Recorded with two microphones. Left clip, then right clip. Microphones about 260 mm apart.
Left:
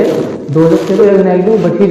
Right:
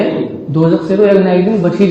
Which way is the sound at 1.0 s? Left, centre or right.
Right.